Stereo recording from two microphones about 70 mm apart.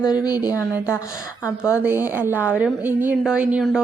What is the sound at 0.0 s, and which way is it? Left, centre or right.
Speech, left.